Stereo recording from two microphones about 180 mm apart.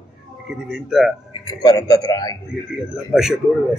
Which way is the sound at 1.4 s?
20° left (ahead or behind).